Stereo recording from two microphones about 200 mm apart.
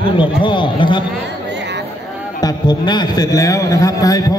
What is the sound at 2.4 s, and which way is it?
A man's voice, 20° left (ahead or behind).